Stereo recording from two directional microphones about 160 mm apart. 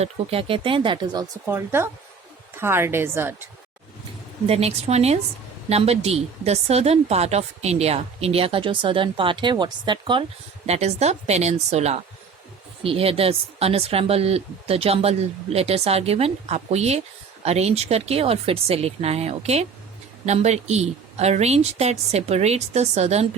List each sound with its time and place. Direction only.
0.0 s speech: 35° right (ahead or behind)
1.5 s a woman's voice: 15° right (ahead or behind)
4.4 s speech: 40° right (ahead or behind)
10.7 s speech: 40° right (ahead or behind)